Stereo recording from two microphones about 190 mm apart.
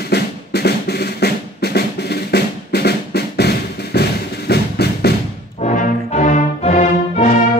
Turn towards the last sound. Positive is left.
turn(degrees=35)  # may be behind; listen again after turning